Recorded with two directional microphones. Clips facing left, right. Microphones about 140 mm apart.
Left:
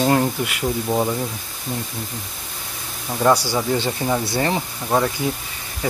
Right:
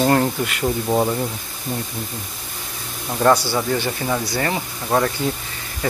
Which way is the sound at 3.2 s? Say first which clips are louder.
Right 1 dB; 10° left (ahead or behind).